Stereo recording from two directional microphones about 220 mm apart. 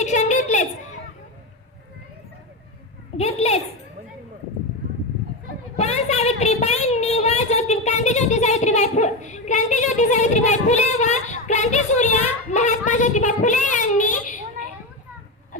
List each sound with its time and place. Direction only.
0.0 s a sound: 30° left (ahead or behind)
3.2 s a child's voice: 30° left (ahead or behind)
5.7 s a woman's voice: 30° left (ahead or behind)